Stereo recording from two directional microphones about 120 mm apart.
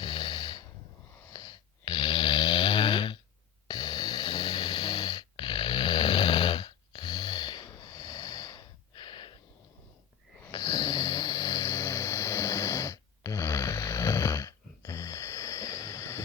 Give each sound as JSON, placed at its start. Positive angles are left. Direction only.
{"t": 0.0, "sound": "snort", "side_deg": 40}
{"t": 1.3, "sound": "snoring", "side_deg": 35}
{"t": 10.5, "sound": "snoring", "side_deg": 35}